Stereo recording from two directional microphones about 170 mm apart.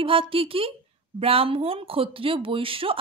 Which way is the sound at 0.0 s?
30° right (ahead or behind).